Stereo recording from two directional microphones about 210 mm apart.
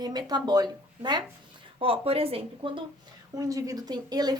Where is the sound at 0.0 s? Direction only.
20° right (ahead or behind).